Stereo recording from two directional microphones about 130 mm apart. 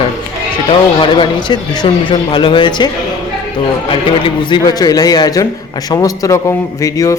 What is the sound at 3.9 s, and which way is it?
A man's voice, 40° left (ahead or behind).